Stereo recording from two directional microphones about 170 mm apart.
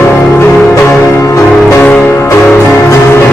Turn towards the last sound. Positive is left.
turn(degrees=15)  # may be behind; listen again after turning